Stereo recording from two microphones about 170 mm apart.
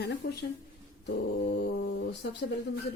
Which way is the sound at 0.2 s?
70° left (ahead or behind).